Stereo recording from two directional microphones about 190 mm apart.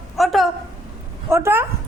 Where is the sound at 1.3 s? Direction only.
15° right (ahead or behind).